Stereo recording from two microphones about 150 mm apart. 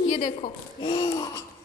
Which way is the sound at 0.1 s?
60° left (ahead or behind).